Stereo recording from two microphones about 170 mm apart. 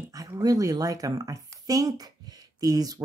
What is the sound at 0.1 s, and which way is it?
Speech, 20° right (ahead or behind).